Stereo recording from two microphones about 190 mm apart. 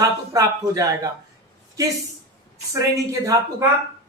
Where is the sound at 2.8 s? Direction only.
15° right (ahead or behind).